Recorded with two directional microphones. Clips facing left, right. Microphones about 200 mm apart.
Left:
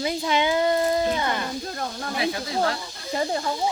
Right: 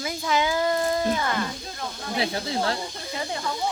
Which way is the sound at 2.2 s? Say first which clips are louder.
Left 2 dB; 30° right (ahead or behind).